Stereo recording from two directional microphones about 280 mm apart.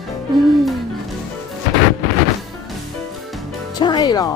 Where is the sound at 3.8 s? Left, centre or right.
Centre.